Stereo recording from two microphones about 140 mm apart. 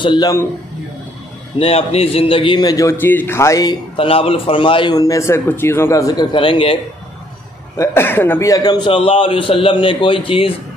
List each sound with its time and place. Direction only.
0.0 s a man's voice: 30° left (ahead or behind)
1.6 s a man's voice: 45° left (ahead or behind); by 3.7 s 25° left (ahead or behind)
3.9 s a man's voice: 40° left (ahead or behind)
4.9 s a man's voice: 25° left (ahead or behind)
6.3 s a man's voice: 35° left (ahead or behind)
7.7 s a man's voice: 20° left (ahead or behind); by 10.5 s 40° left (ahead or behind)